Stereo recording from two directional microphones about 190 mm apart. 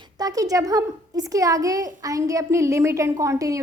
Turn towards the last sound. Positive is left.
turn(degrees=-15)  # may be behind; listen again after turning